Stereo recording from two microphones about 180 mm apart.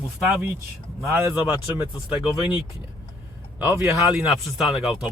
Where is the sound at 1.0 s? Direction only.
5° right (ahead or behind).